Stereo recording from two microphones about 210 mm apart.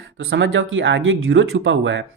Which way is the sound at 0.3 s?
60° right (ahead or behind).